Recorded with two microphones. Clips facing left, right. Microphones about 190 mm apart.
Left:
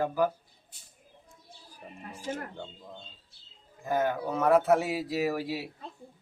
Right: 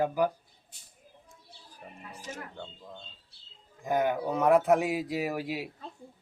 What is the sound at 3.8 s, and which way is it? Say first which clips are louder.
Speech: right 1 dB; 15° right (ahead or behind).